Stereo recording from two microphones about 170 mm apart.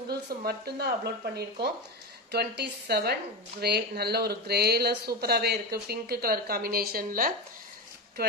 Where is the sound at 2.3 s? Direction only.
75° right (ahead or behind).